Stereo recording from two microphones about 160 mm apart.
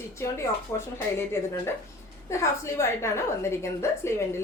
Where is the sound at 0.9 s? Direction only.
15° left (ahead or behind).